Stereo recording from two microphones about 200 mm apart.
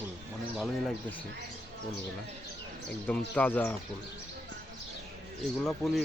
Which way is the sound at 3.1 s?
10° left (ahead or behind).